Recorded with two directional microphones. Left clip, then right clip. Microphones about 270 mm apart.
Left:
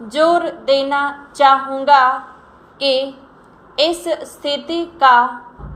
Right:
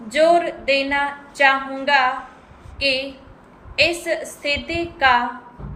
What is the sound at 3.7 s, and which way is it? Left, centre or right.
A woman's voice, centre.